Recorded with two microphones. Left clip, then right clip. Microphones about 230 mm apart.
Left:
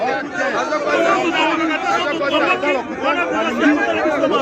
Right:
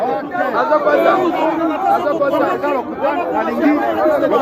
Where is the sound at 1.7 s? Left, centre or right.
Right.